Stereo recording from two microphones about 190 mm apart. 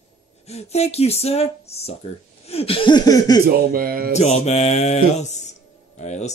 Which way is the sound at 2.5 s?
30° left (ahead or behind).